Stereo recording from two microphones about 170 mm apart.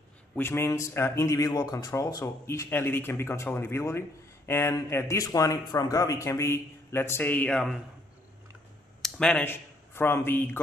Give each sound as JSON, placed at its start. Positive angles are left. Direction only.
{"t": 0.4, "sound": "speech", "side_deg": 15}
{"t": 9.0, "sound": "speech", "side_deg": 5}